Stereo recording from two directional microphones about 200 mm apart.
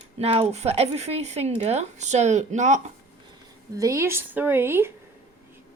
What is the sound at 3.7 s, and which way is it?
Speech, 15° right (ahead or behind).